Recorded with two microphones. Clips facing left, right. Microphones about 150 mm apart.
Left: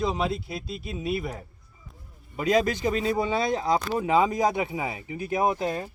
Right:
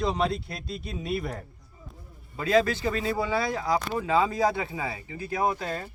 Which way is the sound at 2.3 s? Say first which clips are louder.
Even; 15° left (ahead or behind).